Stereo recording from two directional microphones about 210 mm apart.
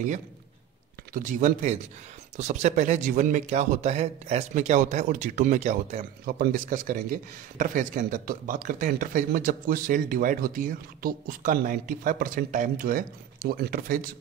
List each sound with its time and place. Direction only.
1.1 s a man's voice: 40° right (ahead or behind)